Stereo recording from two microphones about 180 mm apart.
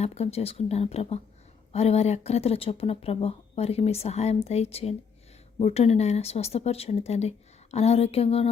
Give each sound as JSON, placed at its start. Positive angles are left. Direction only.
{"t": 0.0, "sound": "speech", "side_deg": 35}